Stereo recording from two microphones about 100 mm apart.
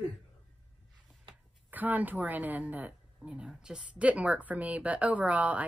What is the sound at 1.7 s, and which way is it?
A woman's voice, 15° right (ahead or behind).